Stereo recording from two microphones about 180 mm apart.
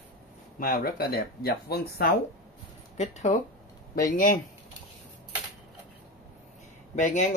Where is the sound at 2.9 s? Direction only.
40° left (ahead or behind).